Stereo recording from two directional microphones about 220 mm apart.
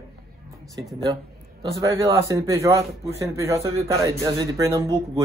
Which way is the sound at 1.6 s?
15° right (ahead or behind).